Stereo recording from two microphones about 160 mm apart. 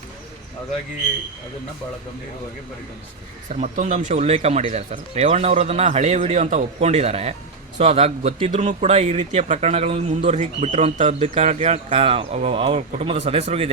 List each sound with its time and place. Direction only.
3.5 s a man's voice: 50° right (ahead or behind)